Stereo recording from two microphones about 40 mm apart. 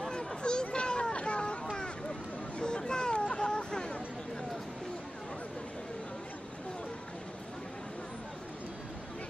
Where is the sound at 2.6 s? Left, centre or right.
Left.